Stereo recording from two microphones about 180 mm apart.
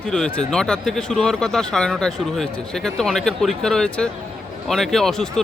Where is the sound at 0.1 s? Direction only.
5° left (ahead or behind).